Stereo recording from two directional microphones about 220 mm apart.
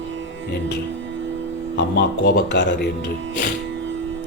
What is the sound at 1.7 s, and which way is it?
Speech, 45° left (ahead or behind).